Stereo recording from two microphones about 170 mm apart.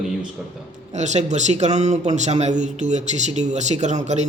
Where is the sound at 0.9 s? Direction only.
40° right (ahead or behind).